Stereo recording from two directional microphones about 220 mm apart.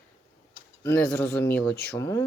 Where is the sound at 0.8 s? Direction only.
10° left (ahead or behind).